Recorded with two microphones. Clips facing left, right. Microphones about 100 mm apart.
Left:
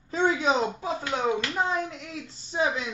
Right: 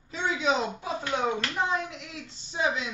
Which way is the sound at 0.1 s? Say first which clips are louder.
Left 3 dB; 40° left (ahead or behind).